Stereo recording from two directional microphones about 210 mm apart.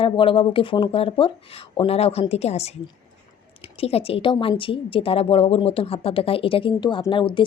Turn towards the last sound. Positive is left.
turn(degrees=25)  # may be behind; listen again after turning